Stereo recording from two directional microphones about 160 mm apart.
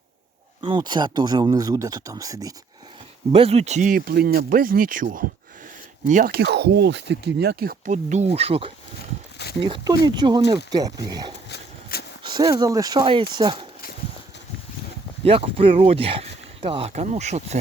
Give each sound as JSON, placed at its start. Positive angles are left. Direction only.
{"t": 0.6, "sound": "speech", "side_deg": -30}
{"t": 3.3, "sound": "speech", "side_deg": -40}
{"t": 6.3, "sound": "speech", "side_deg": -90}
{"t": 7.9, "sound": "speech", "side_deg": -45}
{"t": 11.4, "sound": "horse", "side_deg": 80}
{"t": 12.3, "sound": "speech", "side_deg": -25}
{"t": 15.2, "sound": "speech", "side_deg": -35}
{"t": 16.9, "sound": "speech", "side_deg": -45}